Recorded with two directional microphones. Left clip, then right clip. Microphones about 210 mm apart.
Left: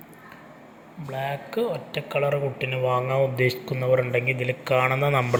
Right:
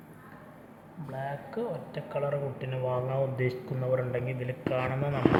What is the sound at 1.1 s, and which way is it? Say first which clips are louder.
Speech: left 8 dB; 30° left (ahead or behind).